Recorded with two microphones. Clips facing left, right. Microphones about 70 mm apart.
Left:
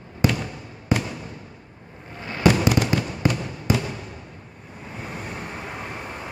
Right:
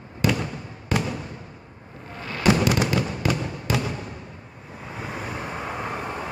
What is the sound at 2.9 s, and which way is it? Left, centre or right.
Fireworks, left.